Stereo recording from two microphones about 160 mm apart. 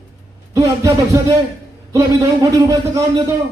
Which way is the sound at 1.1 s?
20° right (ahead or behind).